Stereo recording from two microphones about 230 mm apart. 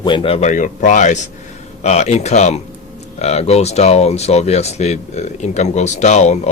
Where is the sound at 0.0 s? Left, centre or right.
Left.